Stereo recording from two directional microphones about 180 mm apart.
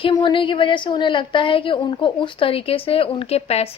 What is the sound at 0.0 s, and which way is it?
Speech, 25° left (ahead or behind).